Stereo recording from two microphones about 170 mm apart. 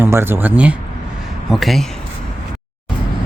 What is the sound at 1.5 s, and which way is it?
Speech, centre (ahead or behind).